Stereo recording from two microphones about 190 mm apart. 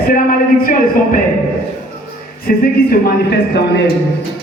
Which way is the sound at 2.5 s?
55° left (ahead or behind).